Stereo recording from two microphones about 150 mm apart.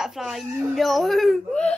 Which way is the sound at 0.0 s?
5° right (ahead or behind).